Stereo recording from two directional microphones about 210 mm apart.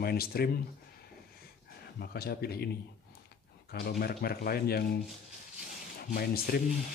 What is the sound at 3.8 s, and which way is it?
Speech, 50° left (ahead or behind).